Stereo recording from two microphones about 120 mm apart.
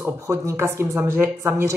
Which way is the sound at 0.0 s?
20° right (ahead or behind).